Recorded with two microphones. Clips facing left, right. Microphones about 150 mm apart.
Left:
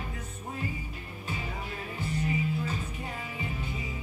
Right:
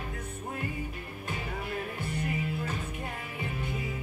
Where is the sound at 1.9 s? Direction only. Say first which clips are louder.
Left 2 dB; 60° right (ahead or behind).